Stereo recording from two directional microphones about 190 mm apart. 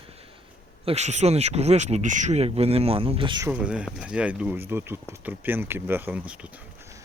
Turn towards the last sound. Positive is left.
turn(degrees=-5)  # may be behind; listen again after turning